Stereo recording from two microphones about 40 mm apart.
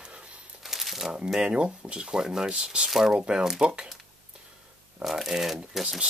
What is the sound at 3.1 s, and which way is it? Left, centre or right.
Speech, right.